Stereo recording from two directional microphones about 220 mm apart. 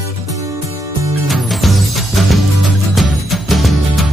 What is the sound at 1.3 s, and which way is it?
Music, centre (ahead or behind).